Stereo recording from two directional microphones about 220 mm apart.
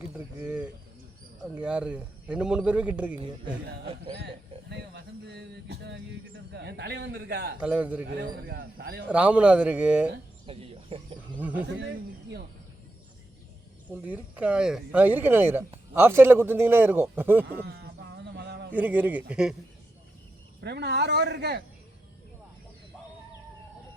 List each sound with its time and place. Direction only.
0.1 s a sound: 5° right (ahead or behind)
1.5 s a man's voice: 5° right (ahead or behind)
3.2 s speech: 25° right (ahead or behind)
4.2 s a sound: 50° right (ahead or behind)
7.6 s speech: 5° right (ahead or behind)
8.4 s speech: 45° right (ahead or behind)
9.0 s a man's voice: 5° right (ahead or behind)
10.4 s cricket: 25° right (ahead or behind)
11.3 s speech: 5° right (ahead or behind)
11.8 s speech: 50° right (ahead or behind)
13.9 s speech: 5° right (ahead or behind)
17.4 s a sound: 45° right (ahead or behind)
18.7 s speech: 5° right (ahead or behind)
20.6 s speech: 50° right (ahead or behind)